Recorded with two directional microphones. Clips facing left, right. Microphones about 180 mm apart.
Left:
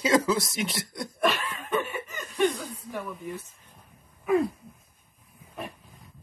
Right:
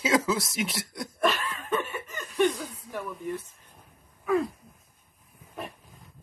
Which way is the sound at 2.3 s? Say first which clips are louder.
Right 1 dB; centre (ahead or behind).